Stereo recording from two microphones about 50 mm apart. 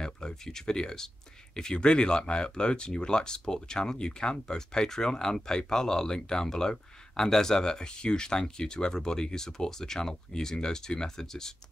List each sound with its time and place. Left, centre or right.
0.0 s speech: centre